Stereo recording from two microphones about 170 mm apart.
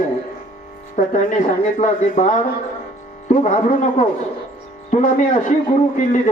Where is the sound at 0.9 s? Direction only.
50° left (ahead or behind).